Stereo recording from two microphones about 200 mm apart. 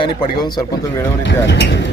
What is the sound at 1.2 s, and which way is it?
Speech, 65° left (ahead or behind).